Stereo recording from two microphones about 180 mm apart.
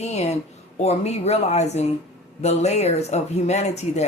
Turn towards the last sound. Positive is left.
turn(degrees=40)  # may be behind; listen again after turning